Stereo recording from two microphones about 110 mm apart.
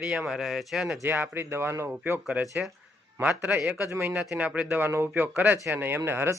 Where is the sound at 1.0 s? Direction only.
20° right (ahead or behind).